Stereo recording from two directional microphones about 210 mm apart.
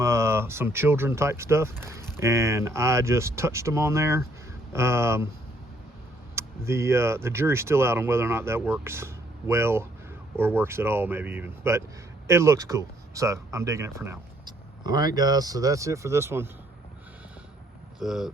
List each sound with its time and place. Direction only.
0.0 s speech: 15° right (ahead or behind)
6.3 s speech: 15° right (ahead or behind)
18.0 s speech: centre (ahead or behind)